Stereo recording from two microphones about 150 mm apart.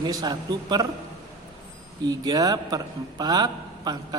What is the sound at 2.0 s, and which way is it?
A man's voice, 25° right (ahead or behind).